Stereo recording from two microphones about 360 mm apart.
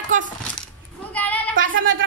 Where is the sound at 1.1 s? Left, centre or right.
Centre.